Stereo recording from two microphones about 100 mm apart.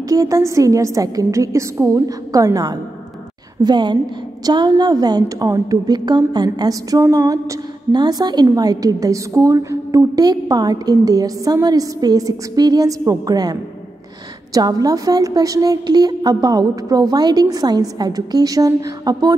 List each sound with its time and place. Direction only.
0.1 s a woman's voice: 35° right (ahead or behind)
3.6 s a woman's voice: 50° right (ahead or behind)